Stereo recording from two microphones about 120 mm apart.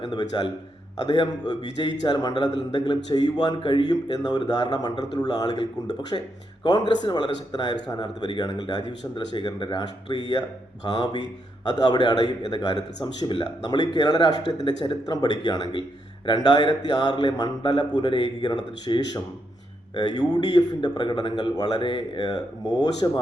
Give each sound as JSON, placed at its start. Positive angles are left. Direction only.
{"t": 0.0, "sound": "a man's voice", "side_deg": 35}